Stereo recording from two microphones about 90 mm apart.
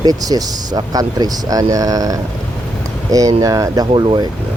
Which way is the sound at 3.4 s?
40° right (ahead or behind).